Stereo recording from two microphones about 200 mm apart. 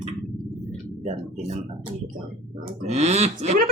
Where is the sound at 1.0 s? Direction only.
30° right (ahead or behind).